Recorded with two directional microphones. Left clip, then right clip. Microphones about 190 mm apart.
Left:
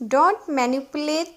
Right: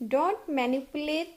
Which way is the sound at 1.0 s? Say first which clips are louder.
Left 8 dB; 50° left (ahead or behind).